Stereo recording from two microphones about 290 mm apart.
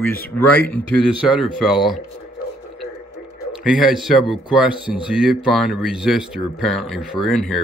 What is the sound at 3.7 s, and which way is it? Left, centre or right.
Speech, centre.